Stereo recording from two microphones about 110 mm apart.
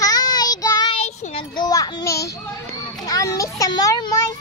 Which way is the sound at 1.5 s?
40° left (ahead or behind).